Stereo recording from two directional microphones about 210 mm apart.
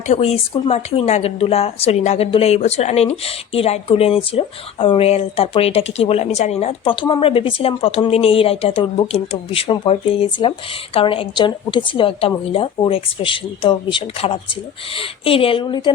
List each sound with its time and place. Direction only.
0.1 s a woman's voice: 30° left (ahead or behind)